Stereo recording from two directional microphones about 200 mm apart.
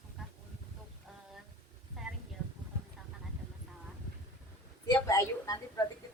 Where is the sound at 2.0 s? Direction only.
Centre (ahead or behind).